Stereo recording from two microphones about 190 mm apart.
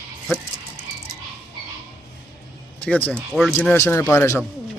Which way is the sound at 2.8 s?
10° left (ahead or behind).